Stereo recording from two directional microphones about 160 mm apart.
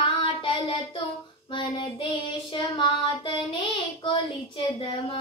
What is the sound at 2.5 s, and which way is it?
Child singing, 30° left (ahead or behind).